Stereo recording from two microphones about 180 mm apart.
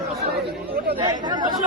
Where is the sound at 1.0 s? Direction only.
25° right (ahead or behind).